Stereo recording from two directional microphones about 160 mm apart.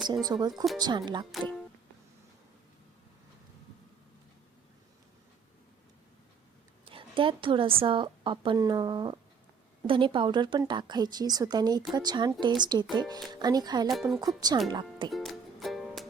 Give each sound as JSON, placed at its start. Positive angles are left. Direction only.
{"t": 0.3, "sound": "speech", "side_deg": -25}
{"t": 0.5, "sound": "speech", "side_deg": 0}
{"t": 0.8, "sound": "speech", "side_deg": -25}
{"t": 6.8, "sound": "a woman's voice", "side_deg": -35}
{"t": 15.1, "sound": "music", "side_deg": 0}